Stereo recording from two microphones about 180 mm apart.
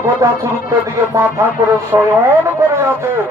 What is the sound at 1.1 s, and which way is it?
Speech, 15° right (ahead or behind).